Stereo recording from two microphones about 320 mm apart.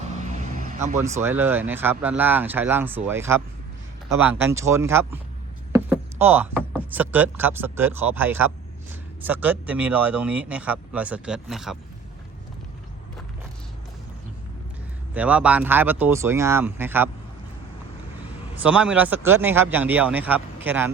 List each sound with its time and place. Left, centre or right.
0.0 s vehicle: right
1.2 s speech: centre
5.7 s a sound: centre
6.6 s speech: centre
15.1 s speech: centre
18.5 s speech: centre